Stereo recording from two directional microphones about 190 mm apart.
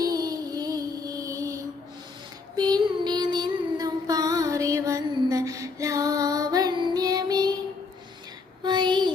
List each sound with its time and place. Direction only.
0.0 s music: 20° right (ahead or behind)
2.6 s child singing: 20° right (ahead or behind)
8.6 s child singing: 25° right (ahead or behind)